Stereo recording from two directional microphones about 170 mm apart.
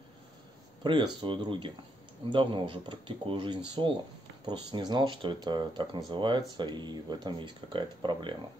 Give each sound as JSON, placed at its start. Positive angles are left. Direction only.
{"t": 0.8, "sound": "speech", "side_deg": -25}